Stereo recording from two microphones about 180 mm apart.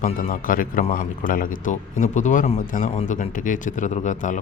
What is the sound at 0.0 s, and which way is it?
A man's voice, 50° left (ahead or behind).